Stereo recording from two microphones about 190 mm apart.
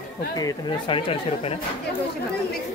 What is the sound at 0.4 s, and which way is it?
Speech, 25° left (ahead or behind).